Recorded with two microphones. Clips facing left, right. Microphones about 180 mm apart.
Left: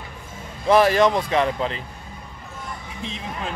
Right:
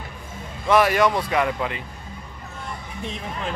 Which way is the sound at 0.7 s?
30° left (ahead or behind).